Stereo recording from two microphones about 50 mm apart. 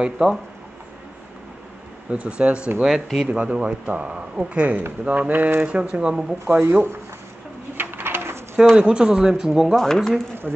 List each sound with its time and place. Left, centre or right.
0.2 s speech: right
2.0 s speech: right
2.8 s speech: centre
3.3 s speech: right
5.7 s speech: right
6.7 s speech: right
7.7 s bird: right
8.7 s speech: centre
9.8 s speech: centre
10.4 s speech: centre